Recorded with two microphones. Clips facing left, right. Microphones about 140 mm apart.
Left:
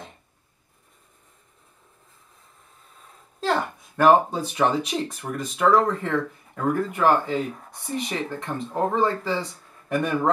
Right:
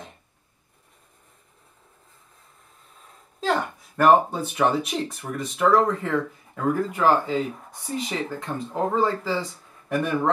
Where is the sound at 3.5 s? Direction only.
Centre (ahead or behind).